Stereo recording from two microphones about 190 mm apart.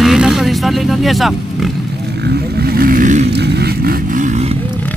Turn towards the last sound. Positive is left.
turn(degrees=-55)  # may be behind; listen again after turning